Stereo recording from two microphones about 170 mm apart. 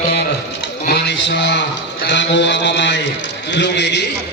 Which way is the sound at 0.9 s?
90° left.